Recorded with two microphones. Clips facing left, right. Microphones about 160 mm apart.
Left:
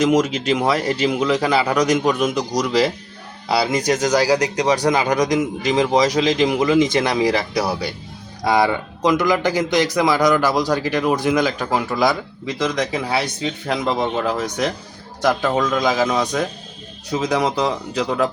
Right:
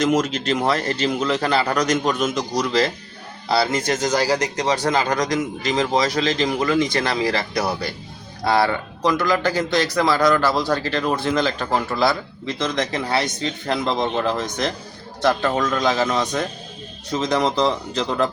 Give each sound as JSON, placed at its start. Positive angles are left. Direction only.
{"t": 0.0, "sound": "a man's voice", "side_deg": 10}